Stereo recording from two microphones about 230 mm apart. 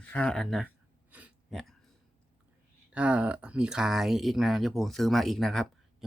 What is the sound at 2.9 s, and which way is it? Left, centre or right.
Speech, centre.